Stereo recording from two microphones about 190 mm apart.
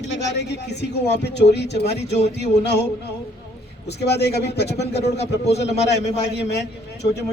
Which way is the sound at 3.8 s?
60° left (ahead or behind).